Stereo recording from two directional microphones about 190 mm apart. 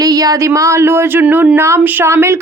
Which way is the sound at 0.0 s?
20° right (ahead or behind).